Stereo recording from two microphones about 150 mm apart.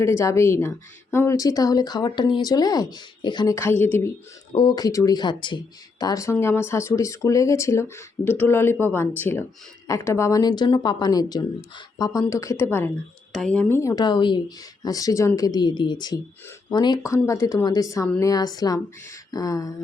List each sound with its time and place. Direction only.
0.0 s speech: 20° left (ahead or behind)
3.5 s speech: 15° left (ahead or behind)
4.5 s speech: 30° left (ahead or behind)